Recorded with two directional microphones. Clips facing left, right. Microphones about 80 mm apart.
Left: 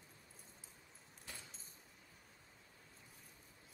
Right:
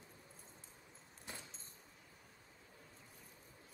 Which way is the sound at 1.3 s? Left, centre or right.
Right.